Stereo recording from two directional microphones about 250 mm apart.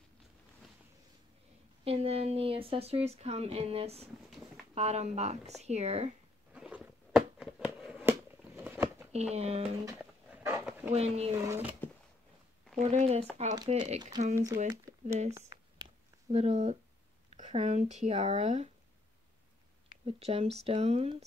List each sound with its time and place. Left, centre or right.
1.9 s speech: right
4.3 s a sound: centre
4.7 s speech: right
6.5 s a sound: centre
9.1 s speech: right
9.9 s dog: centre
11.0 s speech: right
11.4 s speech: centre
12.9 s speech: right
14.3 s speech: centre
14.7 s a sound: centre
16.3 s speech: right
20.1 s speech: right